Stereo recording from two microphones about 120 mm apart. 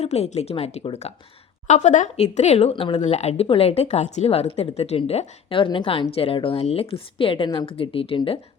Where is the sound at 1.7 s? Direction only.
90° left; by 3.0 s 50° left (ahead or behind).